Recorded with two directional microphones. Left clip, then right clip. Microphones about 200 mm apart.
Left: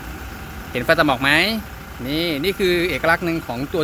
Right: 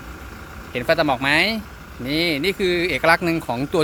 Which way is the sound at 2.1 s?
25° right (ahead or behind).